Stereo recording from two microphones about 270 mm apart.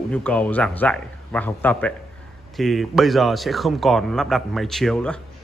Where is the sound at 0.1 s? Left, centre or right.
Centre.